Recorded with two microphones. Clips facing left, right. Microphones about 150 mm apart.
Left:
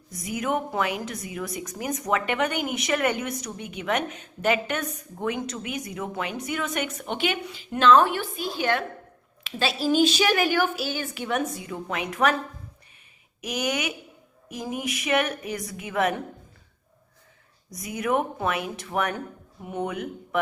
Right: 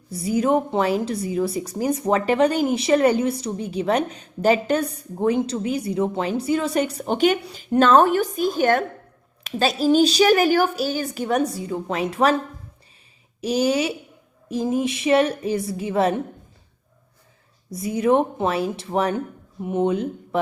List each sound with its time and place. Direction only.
0.1 s a woman's voice: 30° right (ahead or behind)
13.4 s a woman's voice: 30° right (ahead or behind)
17.7 s a woman's voice: 30° right (ahead or behind)